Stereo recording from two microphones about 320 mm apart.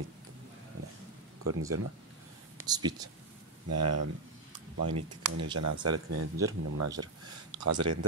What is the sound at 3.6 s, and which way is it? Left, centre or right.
Speech, right.